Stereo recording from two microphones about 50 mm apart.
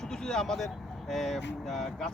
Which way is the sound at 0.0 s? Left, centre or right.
Centre.